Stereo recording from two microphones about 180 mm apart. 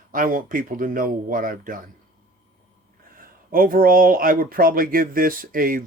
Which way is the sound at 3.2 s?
50° right (ahead or behind).